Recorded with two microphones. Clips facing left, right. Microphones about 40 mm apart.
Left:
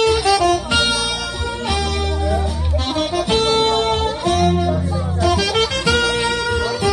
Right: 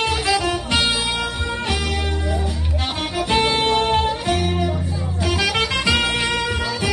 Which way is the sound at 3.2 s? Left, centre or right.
Right.